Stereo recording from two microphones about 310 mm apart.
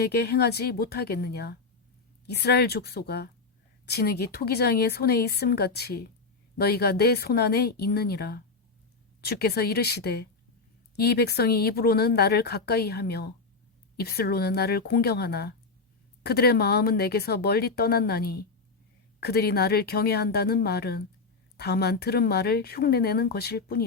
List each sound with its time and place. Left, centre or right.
0.0 s speech: left